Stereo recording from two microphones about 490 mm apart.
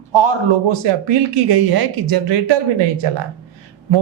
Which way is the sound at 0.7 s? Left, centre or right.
Right.